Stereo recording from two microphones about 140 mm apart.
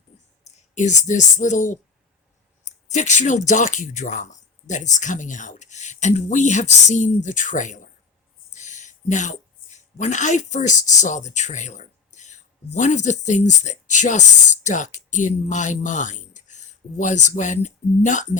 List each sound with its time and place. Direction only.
0.4 s speech: 60° left (ahead or behind)
2.9 s a woman's voice: 55° left (ahead or behind)